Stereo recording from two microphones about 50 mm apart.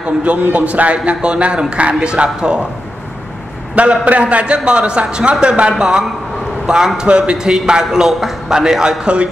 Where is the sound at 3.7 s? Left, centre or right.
Right.